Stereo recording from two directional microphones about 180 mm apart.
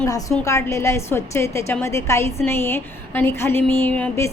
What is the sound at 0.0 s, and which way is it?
A woman's voice, 15° left (ahead or behind).